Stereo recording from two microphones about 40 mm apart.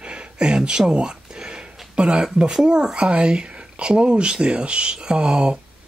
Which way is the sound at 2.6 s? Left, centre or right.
Right.